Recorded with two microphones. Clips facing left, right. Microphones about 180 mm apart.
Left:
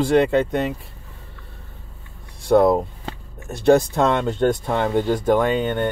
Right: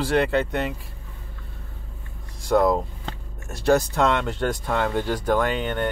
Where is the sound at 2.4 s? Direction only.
25° left (ahead or behind).